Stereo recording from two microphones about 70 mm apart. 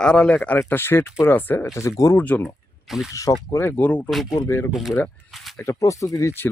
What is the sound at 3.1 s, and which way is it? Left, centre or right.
Speech, left.